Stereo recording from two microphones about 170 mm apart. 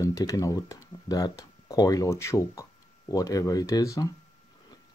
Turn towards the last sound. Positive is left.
turn(degrees=20)  # may be behind; listen again after turning